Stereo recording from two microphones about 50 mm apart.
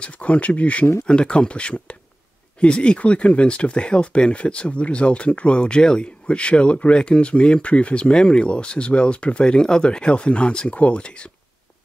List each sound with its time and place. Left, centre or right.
0.0 s speech: left